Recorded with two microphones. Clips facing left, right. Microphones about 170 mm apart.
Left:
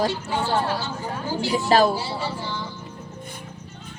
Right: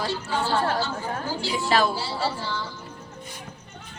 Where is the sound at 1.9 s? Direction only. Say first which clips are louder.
Left 1 dB; 15° left (ahead or behind).